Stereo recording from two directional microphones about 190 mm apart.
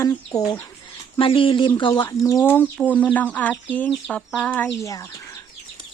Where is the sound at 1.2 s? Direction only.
25° left (ahead or behind).